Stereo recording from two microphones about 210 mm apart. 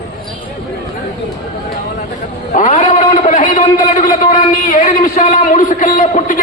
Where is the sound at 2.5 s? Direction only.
35° left (ahead or behind).